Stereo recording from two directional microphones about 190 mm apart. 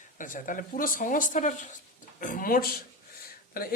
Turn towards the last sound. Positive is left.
turn(degrees=50)  # may be behind; listen again after turning